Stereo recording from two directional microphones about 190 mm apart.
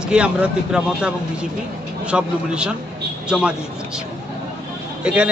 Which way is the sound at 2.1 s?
5° right (ahead or behind).